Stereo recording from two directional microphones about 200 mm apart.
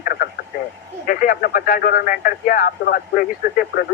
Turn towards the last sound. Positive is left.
turn(degrees=45)  # may be behind; listen again after turning